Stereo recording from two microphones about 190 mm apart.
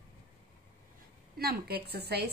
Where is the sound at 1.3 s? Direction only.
55° right (ahead or behind).